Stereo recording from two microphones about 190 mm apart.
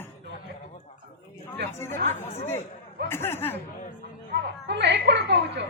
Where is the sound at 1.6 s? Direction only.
10° left (ahead or behind).